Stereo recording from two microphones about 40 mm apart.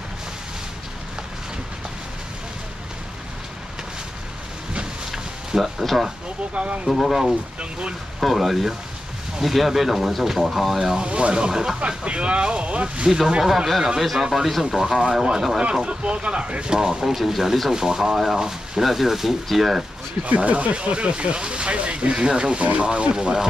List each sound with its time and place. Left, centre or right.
5.6 s speech: centre
6.5 s speech: right
6.9 s speech: centre
11.0 s speech: right
12.0 s speech: right
13.9 s speech: centre
15.5 s speech: right
16.7 s speech: centre
17.0 s speech: centre
20.2 s speech: right